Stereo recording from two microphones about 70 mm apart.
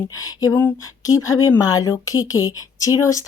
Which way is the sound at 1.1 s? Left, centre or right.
Left.